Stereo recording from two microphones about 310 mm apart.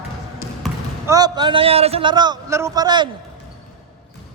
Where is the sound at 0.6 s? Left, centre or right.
Centre.